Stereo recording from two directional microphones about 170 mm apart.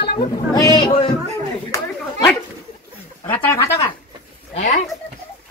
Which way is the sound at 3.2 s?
10° left (ahead or behind).